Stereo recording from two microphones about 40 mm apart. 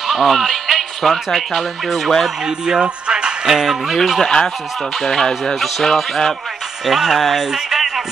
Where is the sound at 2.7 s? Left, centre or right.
Right.